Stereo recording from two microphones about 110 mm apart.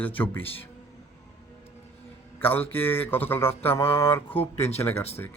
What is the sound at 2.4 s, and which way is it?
A man's voice, 20° left (ahead or behind).